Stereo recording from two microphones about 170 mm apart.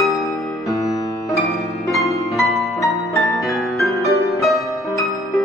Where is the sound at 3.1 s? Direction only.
20° left (ahead or behind).